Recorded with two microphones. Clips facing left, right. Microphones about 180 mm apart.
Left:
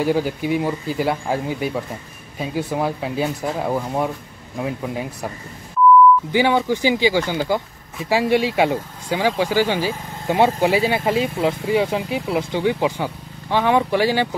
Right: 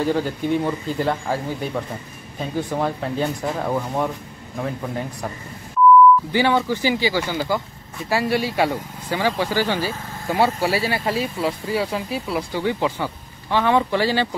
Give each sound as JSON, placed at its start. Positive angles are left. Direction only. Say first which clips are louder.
{"t": 0.0, "sound": "speech", "louder": "left 2 dB", "side_deg": 10}
{"t": 6.3, "sound": "speech", "louder": "left 2 dB", "side_deg": 15}